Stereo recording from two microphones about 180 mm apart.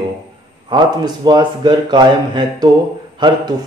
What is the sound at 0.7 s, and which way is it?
Speech, 25° right (ahead or behind).